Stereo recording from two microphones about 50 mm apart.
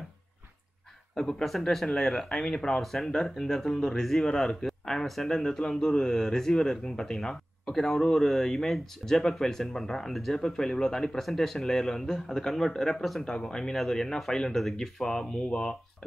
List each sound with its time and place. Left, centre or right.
1.1 s a man's voice: centre
13.2 s a man's voice: centre